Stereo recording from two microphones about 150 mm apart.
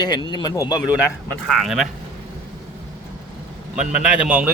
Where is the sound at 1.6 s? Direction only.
Centre (ahead or behind).